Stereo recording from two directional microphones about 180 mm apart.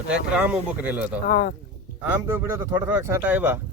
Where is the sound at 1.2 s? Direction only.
50° left (ahead or behind).